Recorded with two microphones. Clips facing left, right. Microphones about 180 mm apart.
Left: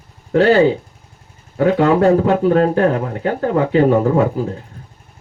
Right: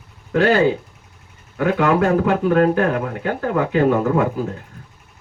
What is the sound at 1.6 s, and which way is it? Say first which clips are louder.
Speech: left 4 dB; 35° left (ahead or behind).